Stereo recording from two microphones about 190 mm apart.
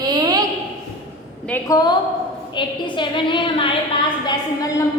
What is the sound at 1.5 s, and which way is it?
A woman's voice, 20° left (ahead or behind).